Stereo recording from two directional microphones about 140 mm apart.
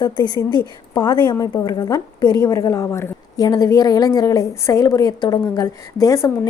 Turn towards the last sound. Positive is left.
turn(degrees=25)  # may be behind; listen again after turning